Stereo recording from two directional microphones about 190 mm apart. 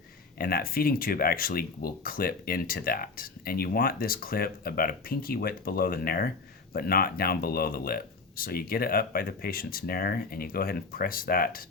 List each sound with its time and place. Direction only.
0.3 s speech: 50° left (ahead or behind)